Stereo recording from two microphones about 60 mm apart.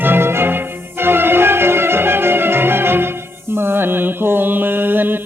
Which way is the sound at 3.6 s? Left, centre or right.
Right.